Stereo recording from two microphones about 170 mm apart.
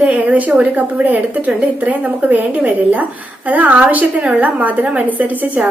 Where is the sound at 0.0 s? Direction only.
10° right (ahead or behind).